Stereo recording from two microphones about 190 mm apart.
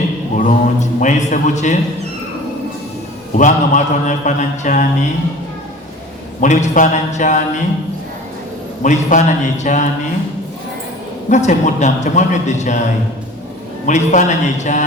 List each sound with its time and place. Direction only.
0.3 s a man's voice: 40° left (ahead or behind)
3.3 s mantra: 40° left (ahead or behind)
6.4 s mantra: 40° left (ahead or behind)
8.8 s mantra: 40° left (ahead or behind)
11.3 s mantra: 40° left (ahead or behind)
13.8 s mantra: 40° left (ahead or behind)